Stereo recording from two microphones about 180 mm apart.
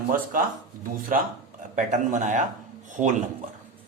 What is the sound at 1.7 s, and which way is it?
A man's voice, 45° right (ahead or behind).